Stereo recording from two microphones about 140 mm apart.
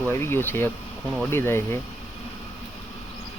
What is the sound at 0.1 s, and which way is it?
Speech, 15° left (ahead or behind).